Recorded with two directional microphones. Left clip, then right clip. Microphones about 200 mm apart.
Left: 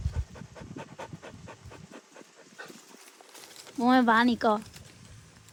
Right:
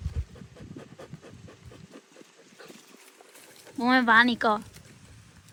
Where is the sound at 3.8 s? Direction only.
15° left (ahead or behind).